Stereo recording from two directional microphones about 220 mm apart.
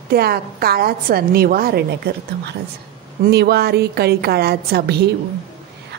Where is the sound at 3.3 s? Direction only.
45° right (ahead or behind).